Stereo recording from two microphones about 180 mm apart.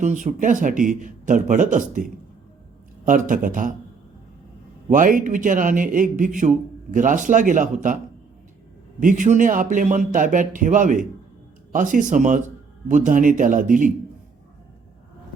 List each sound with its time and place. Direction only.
0.0 s a man's voice: 45° right (ahead or behind)
3.1 s a man's voice: 45° right (ahead or behind)
4.9 s a man's voice: 50° right (ahead or behind)
9.0 s a man's voice: 45° right (ahead or behind)